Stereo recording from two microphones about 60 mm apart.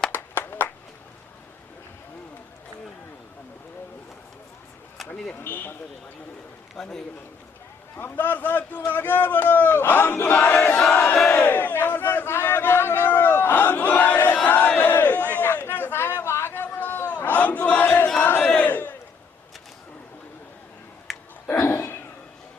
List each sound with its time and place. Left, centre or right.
0.1 s clapping: left
4.9 s vehicle: centre
5.4 s a man's voice: left
6.7 s a man's voice: centre
7.9 s a man's voice: left
10.9 s battle cry: left
11.3 s crowd: left
15.7 s a sound: left
17.1 s battle cry: left
21.1 s a sound: centre
21.6 s a sound: left